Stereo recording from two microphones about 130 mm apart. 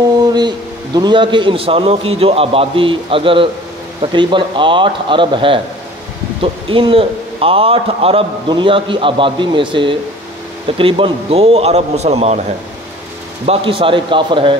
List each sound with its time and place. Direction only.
0.2 s a man's voice: 35° right (ahead or behind); by 12.4 s 55° right (ahead or behind)
13.5 s a man's voice: 45° right (ahead or behind)